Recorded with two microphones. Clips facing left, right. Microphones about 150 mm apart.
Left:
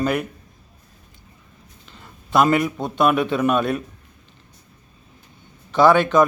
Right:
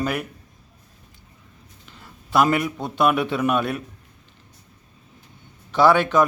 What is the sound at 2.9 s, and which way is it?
Speech, 10° right (ahead or behind).